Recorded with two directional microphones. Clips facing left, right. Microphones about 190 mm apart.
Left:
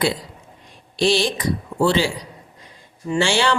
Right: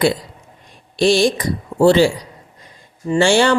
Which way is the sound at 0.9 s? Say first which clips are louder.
Right 5 dB; 50° right (ahead or behind).